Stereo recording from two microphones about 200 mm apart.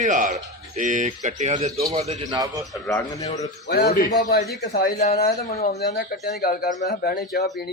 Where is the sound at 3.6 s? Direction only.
55° left (ahead or behind).